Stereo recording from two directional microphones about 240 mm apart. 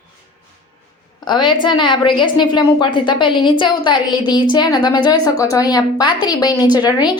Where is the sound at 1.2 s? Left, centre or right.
Centre.